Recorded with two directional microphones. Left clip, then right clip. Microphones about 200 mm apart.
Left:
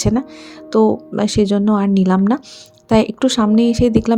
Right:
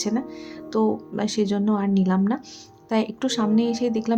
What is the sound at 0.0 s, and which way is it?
Speech, 35° left (ahead or behind).